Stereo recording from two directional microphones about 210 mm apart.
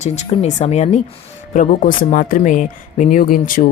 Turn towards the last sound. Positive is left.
turn(degrees=40)  # may be behind; listen again after turning